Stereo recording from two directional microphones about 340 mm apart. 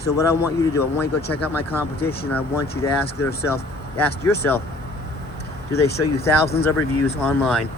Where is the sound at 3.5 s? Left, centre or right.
Centre.